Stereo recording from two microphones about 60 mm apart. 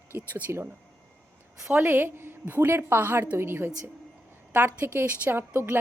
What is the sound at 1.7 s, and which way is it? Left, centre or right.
A woman's voice, right.